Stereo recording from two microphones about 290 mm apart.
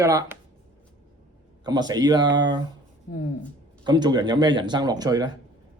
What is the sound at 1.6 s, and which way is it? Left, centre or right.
Speech, centre.